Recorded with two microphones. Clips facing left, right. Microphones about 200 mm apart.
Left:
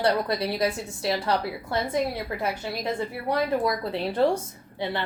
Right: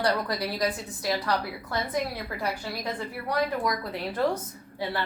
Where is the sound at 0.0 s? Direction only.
25° left (ahead or behind).